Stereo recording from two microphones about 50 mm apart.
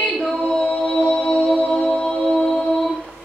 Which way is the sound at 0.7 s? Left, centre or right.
Centre.